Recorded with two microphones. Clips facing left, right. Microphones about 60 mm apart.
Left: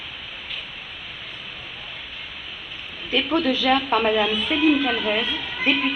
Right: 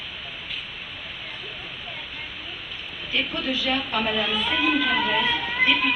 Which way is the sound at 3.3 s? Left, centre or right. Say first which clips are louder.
Left 10 dB; left.